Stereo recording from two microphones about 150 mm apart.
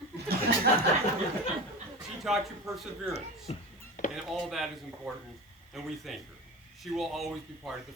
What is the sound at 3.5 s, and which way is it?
Speech, 40° left (ahead or behind).